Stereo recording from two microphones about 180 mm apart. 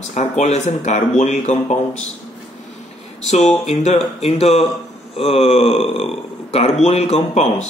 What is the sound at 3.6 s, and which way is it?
Speech, 40° left (ahead or behind).